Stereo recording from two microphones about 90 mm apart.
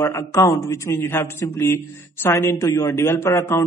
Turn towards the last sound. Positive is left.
turn(degrees=30)  # may be behind; listen again after turning